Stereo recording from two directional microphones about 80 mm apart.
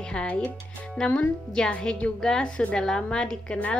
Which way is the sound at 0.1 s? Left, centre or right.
Centre.